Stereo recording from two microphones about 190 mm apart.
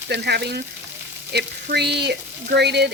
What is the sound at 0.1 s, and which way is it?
Speech, 60° right (ahead or behind).